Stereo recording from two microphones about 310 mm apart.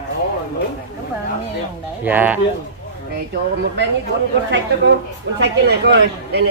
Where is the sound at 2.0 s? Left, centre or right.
Centre.